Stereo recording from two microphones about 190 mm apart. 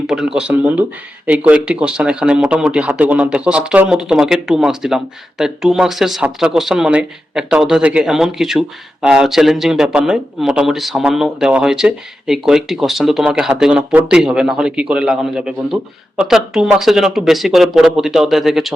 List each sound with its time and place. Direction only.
0.1 s speech: 5° right (ahead or behind)